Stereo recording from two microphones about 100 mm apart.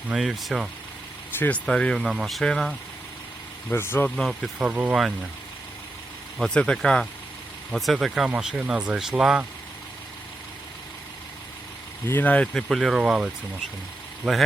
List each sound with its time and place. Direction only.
0.1 s speech: centre (ahead or behind)
1.4 s speech: 15° left (ahead or behind)
2.0 s speech: 5° right (ahead or behind)
3.7 s speech: 20° left (ahead or behind)
4.6 s speech: 10° right (ahead or behind)
6.4 s speech: 10° left (ahead or behind)
12.0 s speech: 20° left (ahead or behind)
12.6 s speech: centre (ahead or behind)
14.3 s speech: 5° left (ahead or behind)